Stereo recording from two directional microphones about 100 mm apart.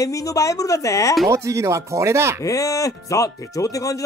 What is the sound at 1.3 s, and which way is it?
Speech, 30° right (ahead or behind).